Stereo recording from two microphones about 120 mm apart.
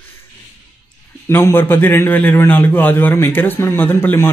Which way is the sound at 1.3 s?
20° left (ahead or behind).